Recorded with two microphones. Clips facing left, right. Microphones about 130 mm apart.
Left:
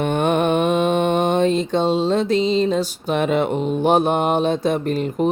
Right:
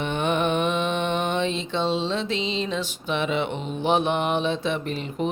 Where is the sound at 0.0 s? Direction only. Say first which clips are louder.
Left 6 dB; 50° left (ahead or behind).